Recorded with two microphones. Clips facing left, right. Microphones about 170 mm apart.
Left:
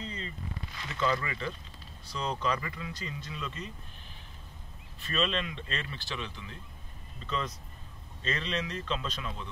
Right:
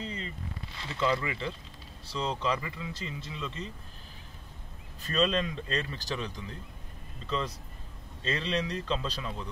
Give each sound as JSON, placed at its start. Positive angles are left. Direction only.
{"t": 0.7, "sound": "speech", "side_deg": -30}
{"t": 5.0, "sound": "speech", "side_deg": -40}